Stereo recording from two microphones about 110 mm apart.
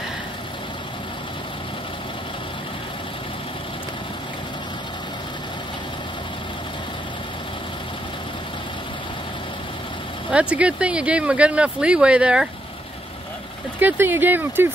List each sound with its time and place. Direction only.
10.3 s speech: 10° right (ahead or behind)
13.7 s speech: 20° right (ahead or behind)